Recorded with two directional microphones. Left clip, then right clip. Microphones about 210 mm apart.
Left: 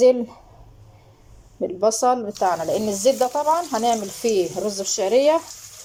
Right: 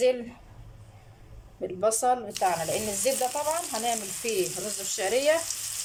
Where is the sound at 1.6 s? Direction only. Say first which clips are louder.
Left 6 dB; 15° left (ahead or behind).